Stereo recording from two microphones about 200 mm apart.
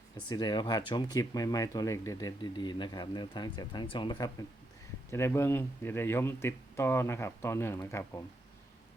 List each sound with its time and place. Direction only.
0.3 s speech: 20° left (ahead or behind)
5.1 s speech: 15° left (ahead or behind)